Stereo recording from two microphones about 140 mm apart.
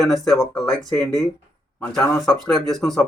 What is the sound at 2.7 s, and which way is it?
Speech, centre (ahead or behind).